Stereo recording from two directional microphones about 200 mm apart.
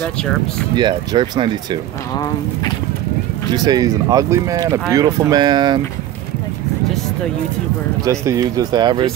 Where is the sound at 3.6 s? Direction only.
20° right (ahead or behind).